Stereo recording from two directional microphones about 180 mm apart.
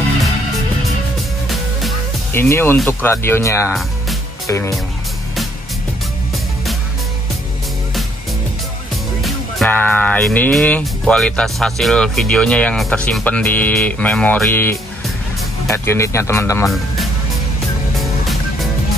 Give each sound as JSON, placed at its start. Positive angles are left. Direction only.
{"t": 1.5, "sound": "music", "side_deg": 0}
{"t": 2.3, "sound": "speech", "side_deg": 15}
{"t": 9.7, "sound": "speech", "side_deg": 10}
{"t": 17.9, "sound": "music", "side_deg": 0}